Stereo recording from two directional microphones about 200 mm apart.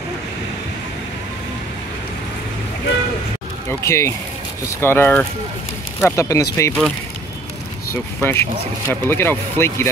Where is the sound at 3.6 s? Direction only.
15° left (ahead or behind).